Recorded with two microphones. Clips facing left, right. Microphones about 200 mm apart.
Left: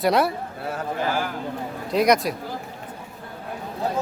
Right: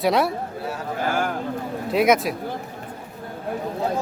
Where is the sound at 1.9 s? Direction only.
5° right (ahead or behind).